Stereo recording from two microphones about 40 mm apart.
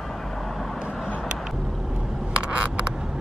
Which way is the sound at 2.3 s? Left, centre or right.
Right.